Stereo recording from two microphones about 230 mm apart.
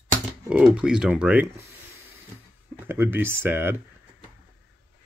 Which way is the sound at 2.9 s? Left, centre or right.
Centre.